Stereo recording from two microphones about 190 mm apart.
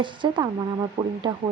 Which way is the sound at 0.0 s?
25° right (ahead or behind).